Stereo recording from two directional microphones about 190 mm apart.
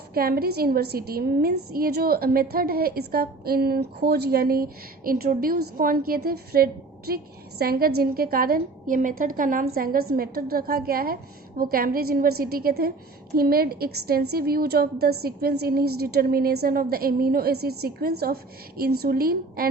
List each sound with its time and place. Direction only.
0.1 s a woman's voice: 55° right (ahead or behind)